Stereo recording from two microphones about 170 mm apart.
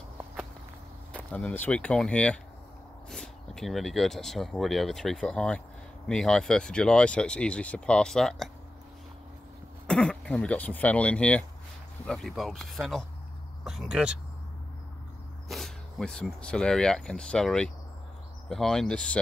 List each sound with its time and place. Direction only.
1.1 s speech: 5° left (ahead or behind)
9.8 s speech: 5° left (ahead or behind)
15.4 s speech: centre (ahead or behind)